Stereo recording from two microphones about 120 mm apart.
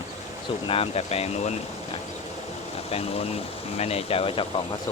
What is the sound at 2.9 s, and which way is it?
Speech, 55° left (ahead or behind).